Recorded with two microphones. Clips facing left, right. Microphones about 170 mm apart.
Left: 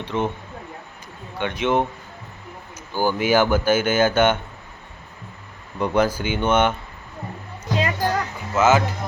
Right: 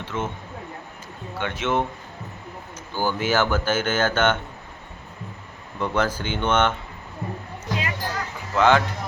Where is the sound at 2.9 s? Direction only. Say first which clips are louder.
Left 4 dB; 10° left (ahead or behind).